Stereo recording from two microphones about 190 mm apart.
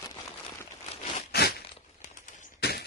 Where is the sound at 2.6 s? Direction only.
55° left (ahead or behind).